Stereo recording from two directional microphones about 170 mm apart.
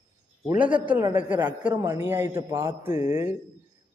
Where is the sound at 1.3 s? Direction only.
10° right (ahead or behind).